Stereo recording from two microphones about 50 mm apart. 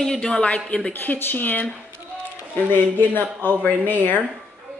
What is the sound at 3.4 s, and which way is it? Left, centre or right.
Speech, left.